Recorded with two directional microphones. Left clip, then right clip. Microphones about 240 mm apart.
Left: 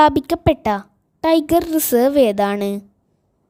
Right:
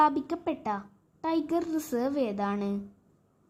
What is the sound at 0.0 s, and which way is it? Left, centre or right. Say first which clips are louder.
A woman's voice: left 12 dB; left.